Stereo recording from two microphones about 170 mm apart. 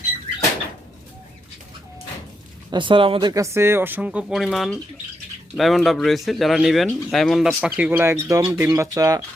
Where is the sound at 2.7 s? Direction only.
30° right (ahead or behind).